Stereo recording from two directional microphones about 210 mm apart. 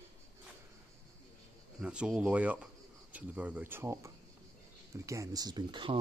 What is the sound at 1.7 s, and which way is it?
Speech, 5° right (ahead or behind).